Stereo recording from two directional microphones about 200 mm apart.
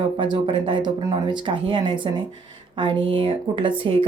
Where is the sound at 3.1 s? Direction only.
25° right (ahead or behind).